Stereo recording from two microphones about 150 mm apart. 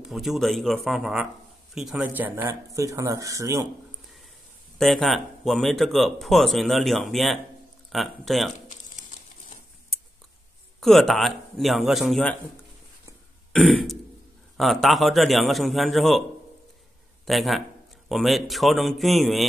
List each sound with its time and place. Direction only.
0.0 s speech: centre (ahead or behind); by 3.6 s 20° right (ahead or behind)
4.7 s speech: centre (ahead or behind)
10.8 s speech: centre (ahead or behind)
13.5 s throat clearing: centre (ahead or behind)
14.6 s speech: centre (ahead or behind)
17.3 s a man's voice: centre (ahead or behind)